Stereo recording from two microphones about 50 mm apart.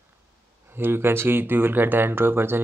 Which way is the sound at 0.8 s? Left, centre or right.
Right.